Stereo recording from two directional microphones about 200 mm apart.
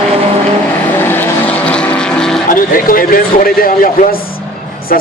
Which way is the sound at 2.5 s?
45° left (ahead or behind).